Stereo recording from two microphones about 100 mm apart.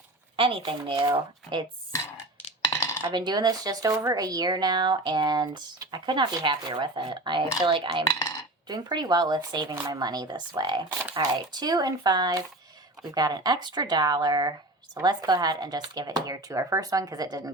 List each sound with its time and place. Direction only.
0.3 s speech: 60° right (ahead or behind)
2.6 s coin: 35° left (ahead or behind)
3.0 s speech: 50° right (ahead or behind)